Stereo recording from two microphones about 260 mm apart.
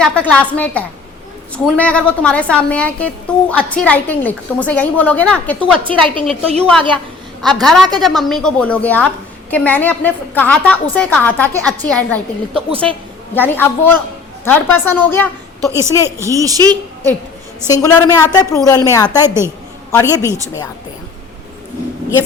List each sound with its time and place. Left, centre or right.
0.0 s a woman's voice: centre
6.4 s a woman's voice: right
7.4 s a woman's voice: centre
15.6 s a woman's voice: centre
17.7 s a woman's voice: centre
20.2 s a woman's voice: centre